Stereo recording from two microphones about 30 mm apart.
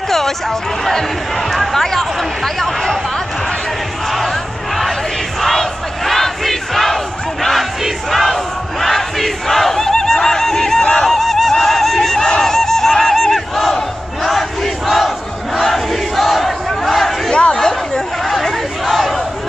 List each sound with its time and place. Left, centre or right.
1.5 s speech: centre
5.4 s crowd: centre
8.1 s battle cry: centre
17.3 s chatter: left
18.4 s crowd: centre